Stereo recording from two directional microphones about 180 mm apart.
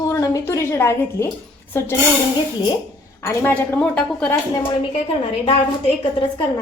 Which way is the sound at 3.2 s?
15° left (ahead or behind).